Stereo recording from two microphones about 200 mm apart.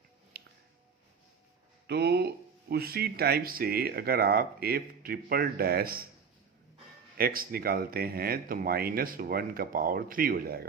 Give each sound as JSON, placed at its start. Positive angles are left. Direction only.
{"t": 0.3, "sound": "finger snapping", "side_deg": -55}
{"t": 1.9, "sound": "speech", "side_deg": -55}
{"t": 7.2, "sound": "speech", "side_deg": -50}